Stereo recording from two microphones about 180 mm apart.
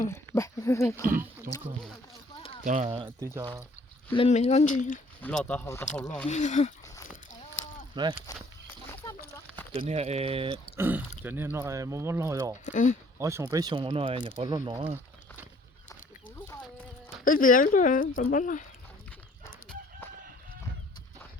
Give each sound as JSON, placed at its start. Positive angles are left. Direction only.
{"t": 0.1, "sound": "speech", "side_deg": 15}
{"t": 2.6, "sound": "speech", "side_deg": -45}
{"t": 3.2, "sound": "speech", "side_deg": -15}
{"t": 4.1, "sound": "speech", "side_deg": 35}
{"t": 5.2, "sound": "speech", "side_deg": 5}
{"t": 6.2, "sound": "speech", "side_deg": 40}
{"t": 8.0, "sound": "speech", "side_deg": -25}
{"t": 9.3, "sound": "a sound", "side_deg": 10}
{"t": 9.7, "sound": "speech", "side_deg": -35}
{"t": 10.8, "sound": "speech", "side_deg": -10}
{"t": 12.6, "sound": "a woman's voice", "side_deg": 45}
{"t": 13.1, "sound": "speech", "side_deg": -15}
{"t": 14.5, "sound": "speech", "side_deg": -20}
{"t": 17.2, "sound": "a woman's voice", "side_deg": 50}